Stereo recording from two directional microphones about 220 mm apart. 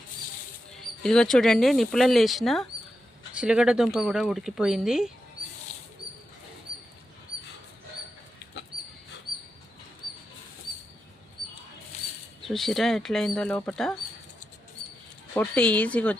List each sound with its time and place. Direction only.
1.0 s speech: 5° left (ahead or behind)
12.5 s speech: centre (ahead or behind)
15.4 s speech: 5° left (ahead or behind)